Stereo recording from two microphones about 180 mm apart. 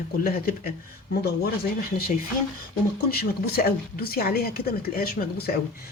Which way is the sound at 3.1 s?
60° left (ahead or behind).